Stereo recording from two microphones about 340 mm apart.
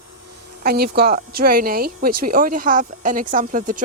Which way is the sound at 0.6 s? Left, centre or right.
Right.